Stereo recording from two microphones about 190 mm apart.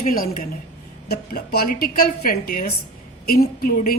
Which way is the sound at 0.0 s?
50° left (ahead or behind).